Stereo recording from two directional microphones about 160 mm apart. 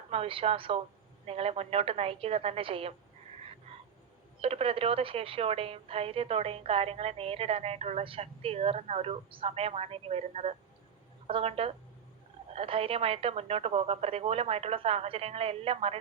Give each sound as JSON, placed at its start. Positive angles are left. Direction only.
{"t": 0.1, "sound": "speech", "side_deg": -35}
{"t": 4.4, "sound": "speech", "side_deg": -35}